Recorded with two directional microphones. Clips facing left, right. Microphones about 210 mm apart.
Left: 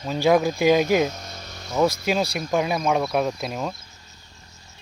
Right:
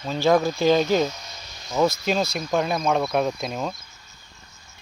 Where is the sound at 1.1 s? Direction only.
55° left (ahead or behind).